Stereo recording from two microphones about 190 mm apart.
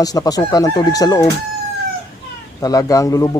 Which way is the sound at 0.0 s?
20° left (ahead or behind).